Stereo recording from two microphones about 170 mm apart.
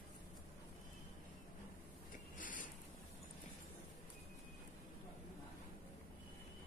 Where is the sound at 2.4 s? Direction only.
50° left (ahead or behind).